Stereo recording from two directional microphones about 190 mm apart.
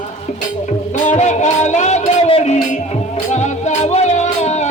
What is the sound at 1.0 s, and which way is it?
Music, 35° left (ahead or behind).